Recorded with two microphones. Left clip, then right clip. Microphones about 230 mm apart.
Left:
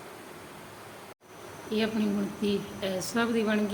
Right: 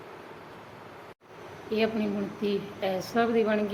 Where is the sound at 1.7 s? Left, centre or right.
Left.